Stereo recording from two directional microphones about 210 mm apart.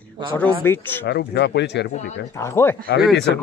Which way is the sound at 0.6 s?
10° left (ahead or behind).